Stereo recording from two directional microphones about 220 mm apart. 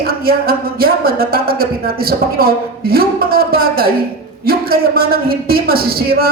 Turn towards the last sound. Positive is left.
turn(degrees=-45)  # may be behind; listen again after turning